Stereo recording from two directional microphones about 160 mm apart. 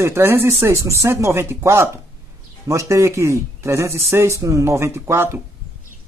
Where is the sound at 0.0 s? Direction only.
15° right (ahead or behind).